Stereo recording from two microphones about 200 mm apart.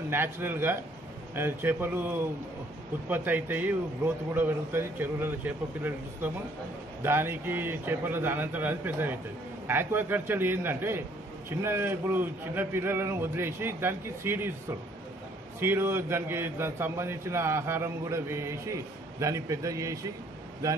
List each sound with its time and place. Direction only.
0.1 s a man's voice: 10° right (ahead or behind)
15.6 s a man's voice: 10° right (ahead or behind)